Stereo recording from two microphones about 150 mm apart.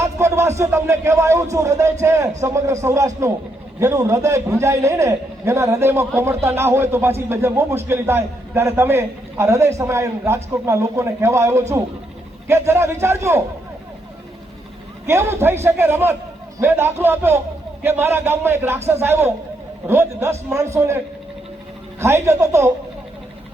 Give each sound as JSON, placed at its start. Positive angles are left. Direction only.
{"t": 0.0, "sound": "a man's voice", "side_deg": -20}
{"t": 15.0, "sound": "a man's voice", "side_deg": -15}
{"t": 22.0, "sound": "a man's voice", "side_deg": -20}